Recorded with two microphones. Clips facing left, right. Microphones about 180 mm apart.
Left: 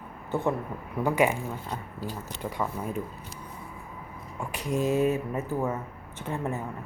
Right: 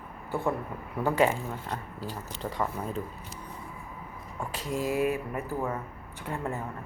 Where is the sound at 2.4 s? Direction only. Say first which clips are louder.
Even; 10° left (ahead or behind).